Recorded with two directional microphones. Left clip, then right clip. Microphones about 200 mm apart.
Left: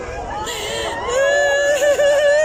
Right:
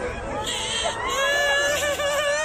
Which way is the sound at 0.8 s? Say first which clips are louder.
Left 7 dB; 40° left (ahead or behind).